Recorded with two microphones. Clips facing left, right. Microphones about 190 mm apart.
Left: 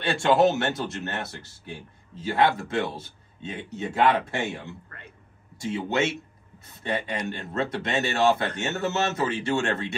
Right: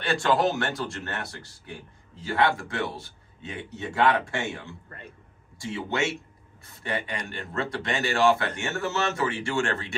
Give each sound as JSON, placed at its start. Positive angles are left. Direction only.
{"t": 0.3, "sound": "speech", "side_deg": 25}